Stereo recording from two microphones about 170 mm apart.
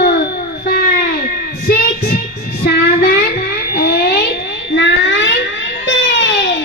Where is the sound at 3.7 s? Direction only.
65° left (ahead or behind).